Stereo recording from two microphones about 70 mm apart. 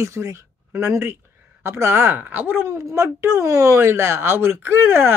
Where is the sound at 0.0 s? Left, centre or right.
Right.